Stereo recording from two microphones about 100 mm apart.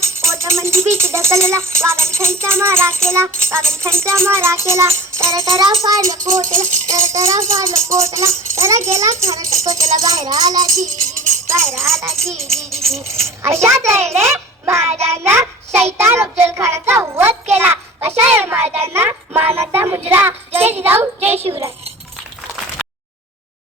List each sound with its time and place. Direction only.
0.0 s speech: 30° right (ahead or behind)
12.1 s music: 5° left (ahead or behind)
13.2 s speech: 30° right (ahead or behind)
14.6 s child singing: 25° right (ahead or behind)
16.0 s a child's voice: 25° right (ahead or behind)